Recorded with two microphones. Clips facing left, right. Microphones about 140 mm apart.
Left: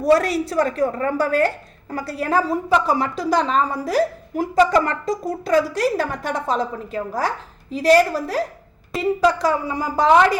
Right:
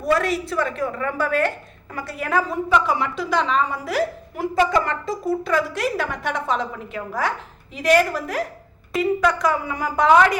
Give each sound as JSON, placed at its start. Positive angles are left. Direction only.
{"t": 0.0, "sound": "a woman's voice", "side_deg": 35}